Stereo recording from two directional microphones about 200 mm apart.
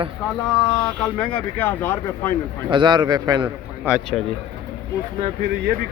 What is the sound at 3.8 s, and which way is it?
Speech, 5° right (ahead or behind).